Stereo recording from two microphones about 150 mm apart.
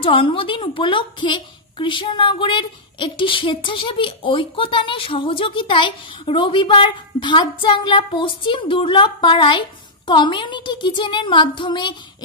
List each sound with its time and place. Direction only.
0.0 s a woman's voice: 35° left (ahead or behind)